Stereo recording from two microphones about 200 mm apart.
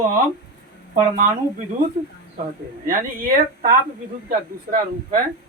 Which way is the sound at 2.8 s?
45° right (ahead or behind).